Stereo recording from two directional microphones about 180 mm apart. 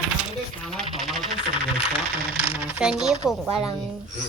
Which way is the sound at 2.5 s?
10° right (ahead or behind).